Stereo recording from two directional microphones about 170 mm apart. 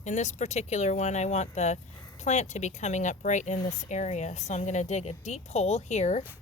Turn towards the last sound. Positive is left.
turn(degrees=40)  # may be behind; listen again after turning